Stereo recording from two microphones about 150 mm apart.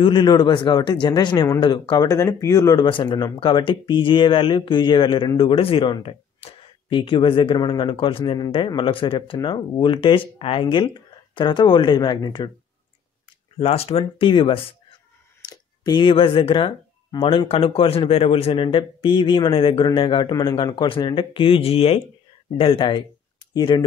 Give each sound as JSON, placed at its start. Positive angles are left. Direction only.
{"t": 0.0, "sound": "a man's voice", "side_deg": 30}
{"t": 13.6, "sound": "speech", "side_deg": 40}
{"t": 15.4, "sound": "speech", "side_deg": 25}